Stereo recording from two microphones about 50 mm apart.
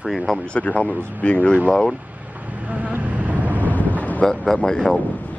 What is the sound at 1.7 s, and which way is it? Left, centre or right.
Speech, centre.